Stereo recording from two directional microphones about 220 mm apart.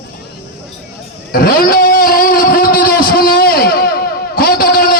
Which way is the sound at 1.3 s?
40° left (ahead or behind).